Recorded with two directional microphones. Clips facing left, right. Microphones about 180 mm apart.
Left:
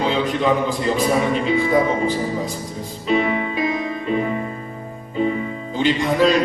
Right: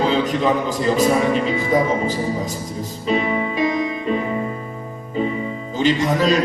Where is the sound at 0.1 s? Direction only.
45° right (ahead or behind).